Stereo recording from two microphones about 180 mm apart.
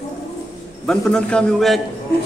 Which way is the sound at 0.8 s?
5° left (ahead or behind).